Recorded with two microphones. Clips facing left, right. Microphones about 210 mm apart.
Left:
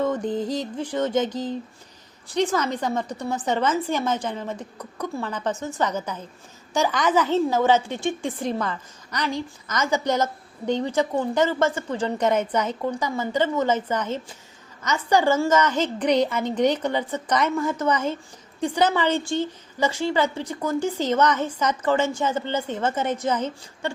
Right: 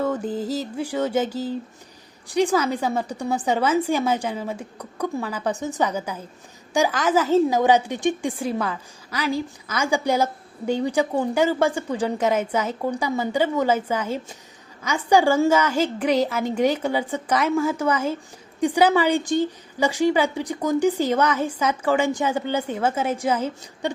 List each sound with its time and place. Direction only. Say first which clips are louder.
0.0 s a woman's voice: left 1 dB; 5° right (ahead or behind)